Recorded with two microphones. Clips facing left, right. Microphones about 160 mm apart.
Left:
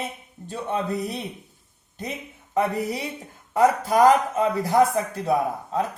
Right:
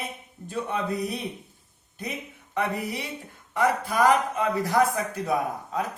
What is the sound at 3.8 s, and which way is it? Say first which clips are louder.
Speech: left 5 dB; 40° left (ahead or behind).